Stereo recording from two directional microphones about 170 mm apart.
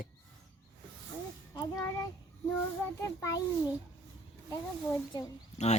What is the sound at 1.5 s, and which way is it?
Child singing, 20° left (ahead or behind).